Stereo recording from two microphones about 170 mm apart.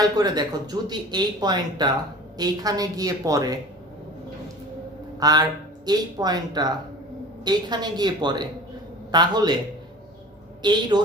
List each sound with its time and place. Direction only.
0.0 s speech: 25° right (ahead or behind)
5.2 s speech: 25° right (ahead or behind)
10.6 s speech: 25° right (ahead or behind)